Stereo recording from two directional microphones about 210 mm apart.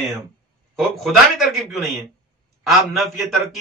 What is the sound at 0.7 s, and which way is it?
A man's voice, centre (ahead or behind).